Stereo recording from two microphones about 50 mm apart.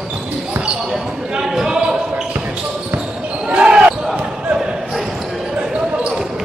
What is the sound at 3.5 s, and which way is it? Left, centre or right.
Basketball bounce, centre.